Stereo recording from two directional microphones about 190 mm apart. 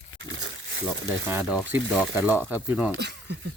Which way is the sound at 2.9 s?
65° right (ahead or behind).